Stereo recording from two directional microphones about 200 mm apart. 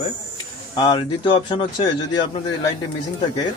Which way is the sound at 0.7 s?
25° left (ahead or behind).